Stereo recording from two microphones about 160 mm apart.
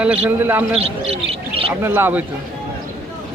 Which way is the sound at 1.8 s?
15° right (ahead or behind).